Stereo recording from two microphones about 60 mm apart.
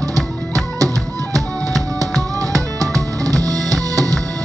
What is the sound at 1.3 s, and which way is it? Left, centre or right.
Music, right.